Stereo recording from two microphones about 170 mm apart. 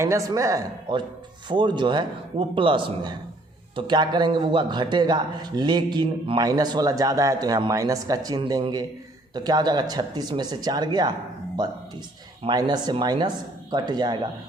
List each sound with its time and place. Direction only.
0.0 s speech: 20° right (ahead or behind)